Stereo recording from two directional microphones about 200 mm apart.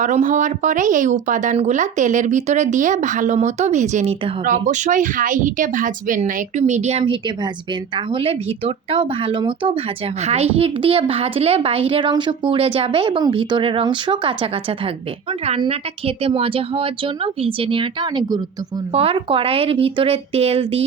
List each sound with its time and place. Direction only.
0.0 s speech: 40° right (ahead or behind)